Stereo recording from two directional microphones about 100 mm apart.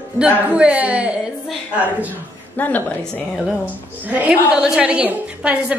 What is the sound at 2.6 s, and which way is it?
Speech, 15° left (ahead or behind).